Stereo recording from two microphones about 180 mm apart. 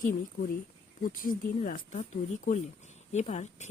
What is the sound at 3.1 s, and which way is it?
Speech, 40° left (ahead or behind).